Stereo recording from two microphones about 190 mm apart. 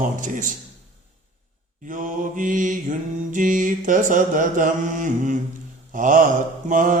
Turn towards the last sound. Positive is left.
turn(degrees=-45)  # may be behind; listen again after turning